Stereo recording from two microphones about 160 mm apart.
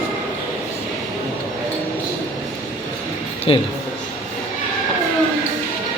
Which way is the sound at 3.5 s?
35° left (ahead or behind).